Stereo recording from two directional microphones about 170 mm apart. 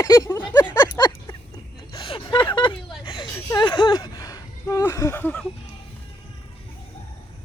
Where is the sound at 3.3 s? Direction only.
25° left (ahead or behind); by 5.5 s 10° left (ahead or behind).